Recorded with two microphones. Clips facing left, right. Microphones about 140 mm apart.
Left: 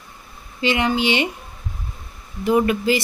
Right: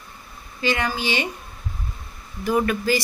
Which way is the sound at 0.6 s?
25° left (ahead or behind).